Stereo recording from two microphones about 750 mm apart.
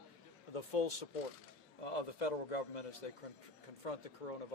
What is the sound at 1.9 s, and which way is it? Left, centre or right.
A man's voice, left.